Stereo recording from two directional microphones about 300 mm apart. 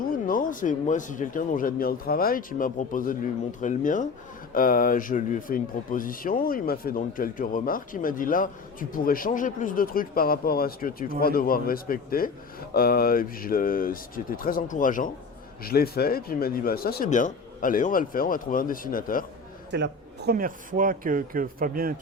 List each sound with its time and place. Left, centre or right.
0.0 s speech: left
19.7 s speech: right